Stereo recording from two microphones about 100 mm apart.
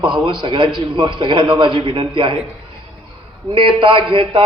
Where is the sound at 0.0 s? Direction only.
55° right (ahead or behind).